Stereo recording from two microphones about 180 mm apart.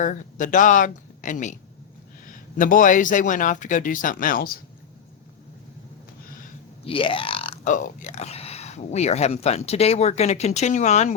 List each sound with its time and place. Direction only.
0.0 s speech: 45° left (ahead or behind)
2.6 s speech: 50° left (ahead or behind)
6.8 s speech: 30° left (ahead or behind)